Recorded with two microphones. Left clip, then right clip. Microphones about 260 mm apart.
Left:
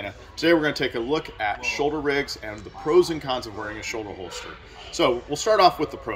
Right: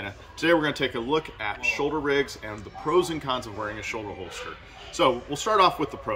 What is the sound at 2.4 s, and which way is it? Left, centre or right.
Speech, right.